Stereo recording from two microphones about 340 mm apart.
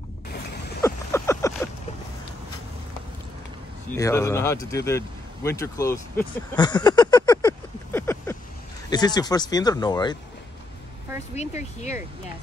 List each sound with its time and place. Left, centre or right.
0.8 s a sound: centre
3.9 s speech: centre
11.3 s speech: centre